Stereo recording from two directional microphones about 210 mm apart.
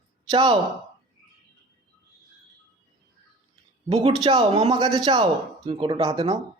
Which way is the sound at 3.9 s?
30° right (ahead or behind).